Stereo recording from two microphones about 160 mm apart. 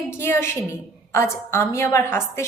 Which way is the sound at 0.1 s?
15° left (ahead or behind).